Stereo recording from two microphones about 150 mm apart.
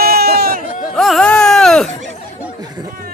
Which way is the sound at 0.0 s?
90° right.